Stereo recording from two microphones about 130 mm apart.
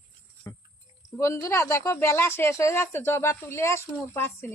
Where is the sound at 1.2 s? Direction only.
20° left (ahead or behind).